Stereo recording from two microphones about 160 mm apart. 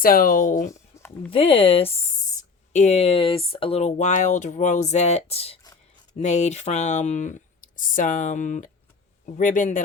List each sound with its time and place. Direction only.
0.0 s speech: 60° left (ahead or behind)
0.7 s a sound: 15° left (ahead or behind)
1.3 s speech: 35° left (ahead or behind); by 9.8 s 50° left (ahead or behind)